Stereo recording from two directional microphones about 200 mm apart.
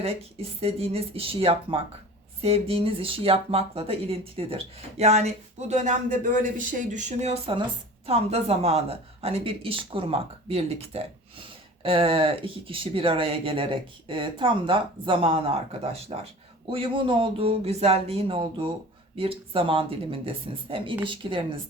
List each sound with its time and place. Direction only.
0.0 s speech: 30° right (ahead or behind)